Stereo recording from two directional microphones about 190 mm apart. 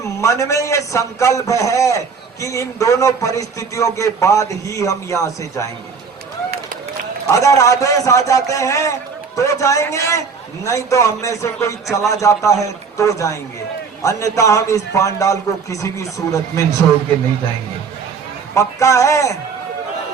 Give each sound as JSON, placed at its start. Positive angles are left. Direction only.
{"t": 0.0, "sound": "a man's voice", "side_deg": 15}
{"t": 7.3, "sound": "a man's voice", "side_deg": 15}
{"t": 18.5, "sound": "a man's voice", "side_deg": 15}